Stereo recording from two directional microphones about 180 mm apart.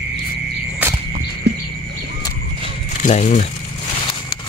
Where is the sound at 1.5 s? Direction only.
70° right (ahead or behind).